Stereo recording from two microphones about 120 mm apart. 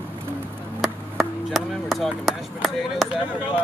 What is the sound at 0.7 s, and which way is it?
Speech, centre (ahead or behind).